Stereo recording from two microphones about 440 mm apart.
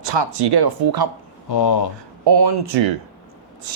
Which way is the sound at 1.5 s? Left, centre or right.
Left.